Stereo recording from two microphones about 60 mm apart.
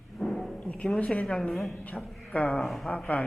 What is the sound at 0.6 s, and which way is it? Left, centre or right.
Speech, centre.